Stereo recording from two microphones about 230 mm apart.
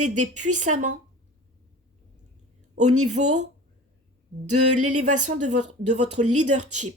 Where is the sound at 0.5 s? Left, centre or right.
Right.